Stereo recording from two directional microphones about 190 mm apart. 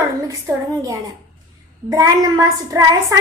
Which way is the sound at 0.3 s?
15° right (ahead or behind).